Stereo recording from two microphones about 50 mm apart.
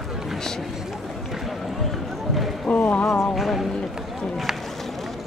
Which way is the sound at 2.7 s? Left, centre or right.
Centre.